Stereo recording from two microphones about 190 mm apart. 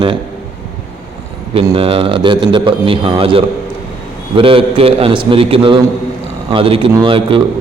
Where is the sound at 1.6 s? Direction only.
30° right (ahead or behind).